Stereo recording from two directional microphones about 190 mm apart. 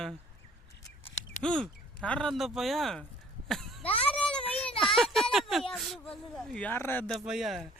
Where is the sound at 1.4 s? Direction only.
5° left (ahead or behind).